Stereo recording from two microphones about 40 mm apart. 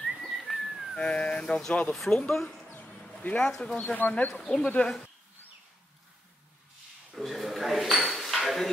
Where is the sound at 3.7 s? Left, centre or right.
Left.